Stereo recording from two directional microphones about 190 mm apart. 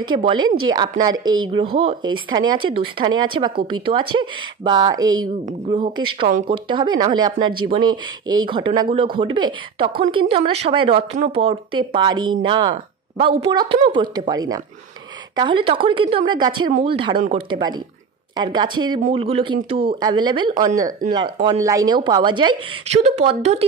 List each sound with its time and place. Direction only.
0.1 s speech: 25° right (ahead or behind)
6.2 s speech: 40° right (ahead or behind)
6.7 s speech: 25° right (ahead or behind)